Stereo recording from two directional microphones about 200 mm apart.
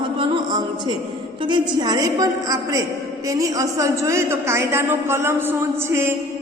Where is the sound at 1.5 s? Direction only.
20° right (ahead or behind).